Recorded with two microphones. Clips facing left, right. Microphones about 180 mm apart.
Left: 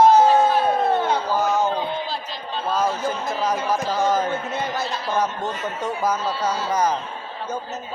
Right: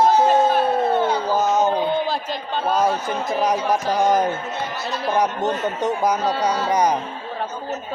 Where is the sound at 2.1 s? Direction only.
50° right (ahead or behind).